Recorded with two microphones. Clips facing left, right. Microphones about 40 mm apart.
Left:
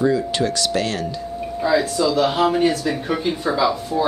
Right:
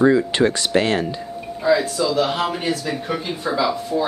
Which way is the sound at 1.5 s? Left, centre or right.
Centre.